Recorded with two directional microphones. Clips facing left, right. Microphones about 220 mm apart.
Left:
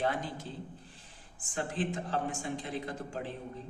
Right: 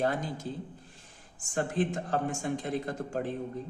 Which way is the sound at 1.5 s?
45° right (ahead or behind).